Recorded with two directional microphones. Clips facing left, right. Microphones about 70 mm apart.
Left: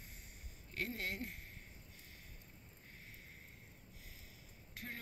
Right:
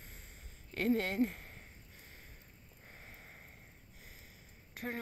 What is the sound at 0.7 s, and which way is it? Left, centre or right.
Speech, right.